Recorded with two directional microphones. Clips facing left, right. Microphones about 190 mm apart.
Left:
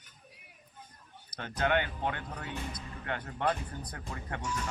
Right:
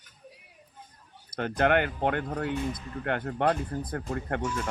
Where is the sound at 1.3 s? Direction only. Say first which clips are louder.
Right 6 dB; 60° right (ahead or behind).